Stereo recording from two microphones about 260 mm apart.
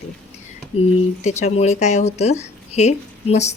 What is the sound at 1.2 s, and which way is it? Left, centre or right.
Speech, left.